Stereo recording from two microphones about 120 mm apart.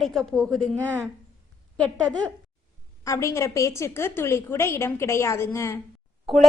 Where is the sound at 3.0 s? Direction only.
25° left (ahead or behind).